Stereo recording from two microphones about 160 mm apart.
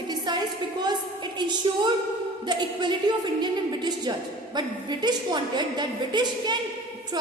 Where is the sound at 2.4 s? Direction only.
30° right (ahead or behind).